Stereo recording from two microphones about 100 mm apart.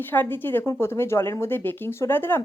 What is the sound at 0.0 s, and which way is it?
Speech, 20° left (ahead or behind).